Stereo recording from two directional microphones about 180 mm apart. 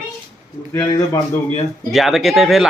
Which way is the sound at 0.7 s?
20° left (ahead or behind).